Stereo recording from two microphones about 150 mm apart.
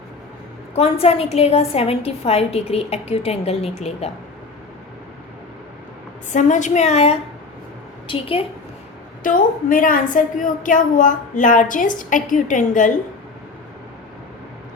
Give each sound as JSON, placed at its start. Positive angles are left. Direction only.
{"t": 0.8, "sound": "a woman's voice", "side_deg": 40}
{"t": 6.3, "sound": "a woman's voice", "side_deg": 55}
{"t": 9.2, "sound": "a woman's voice", "side_deg": 65}